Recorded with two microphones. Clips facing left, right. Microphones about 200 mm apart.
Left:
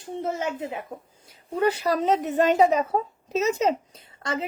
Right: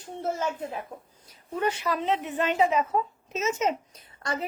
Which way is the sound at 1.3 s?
35° left (ahead or behind).